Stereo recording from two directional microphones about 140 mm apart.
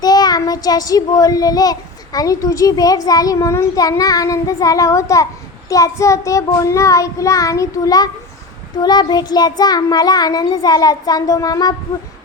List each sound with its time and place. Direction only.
0.0 s a child's voice: 30° left (ahead or behind)